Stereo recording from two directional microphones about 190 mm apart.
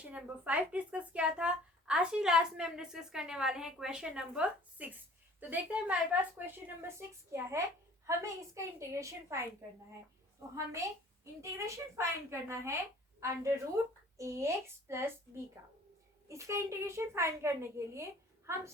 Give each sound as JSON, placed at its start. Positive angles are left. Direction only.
{"t": 0.0, "sound": "a child's voice", "side_deg": -5}
{"t": 11.3, "sound": "a child's voice", "side_deg": -15}
{"t": 16.3, "sound": "a child's voice", "side_deg": -15}